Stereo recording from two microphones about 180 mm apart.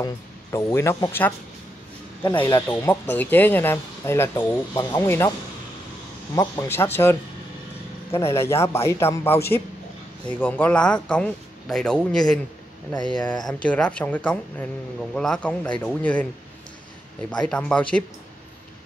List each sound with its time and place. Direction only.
0.0 s speech: 15° left (ahead or behind)
6.3 s speech: 15° left (ahead or behind)
8.3 s speech: 15° left (ahead or behind)
17.3 s speech: 5° left (ahead or behind)